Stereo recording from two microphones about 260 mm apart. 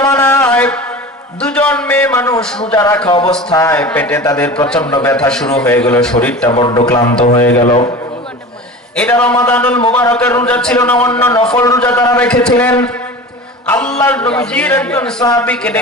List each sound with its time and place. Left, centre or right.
0.0 s music: centre
1.4 s a sound: centre
2.7 s a man's voice: centre
5.1 s a man's voice: centre
6.5 s speech: centre
9.2 s a man's voice: centre